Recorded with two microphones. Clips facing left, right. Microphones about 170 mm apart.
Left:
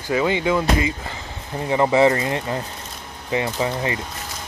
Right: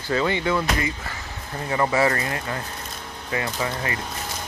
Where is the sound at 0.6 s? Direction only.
25° left (ahead or behind).